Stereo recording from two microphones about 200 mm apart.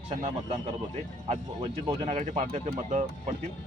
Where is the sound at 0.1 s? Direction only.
35° right (ahead or behind).